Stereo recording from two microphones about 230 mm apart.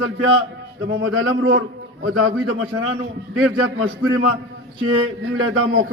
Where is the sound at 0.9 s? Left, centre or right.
Right.